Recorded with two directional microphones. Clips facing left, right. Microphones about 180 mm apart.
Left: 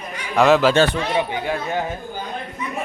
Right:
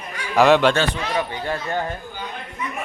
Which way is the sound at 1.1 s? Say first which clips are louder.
Left 2 dB; 15° left (ahead or behind).